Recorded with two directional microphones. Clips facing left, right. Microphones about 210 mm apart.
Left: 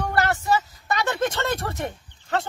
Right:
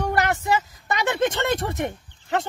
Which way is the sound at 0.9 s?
20° right (ahead or behind).